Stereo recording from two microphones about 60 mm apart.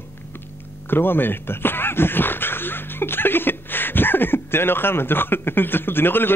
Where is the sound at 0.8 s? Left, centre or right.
Left.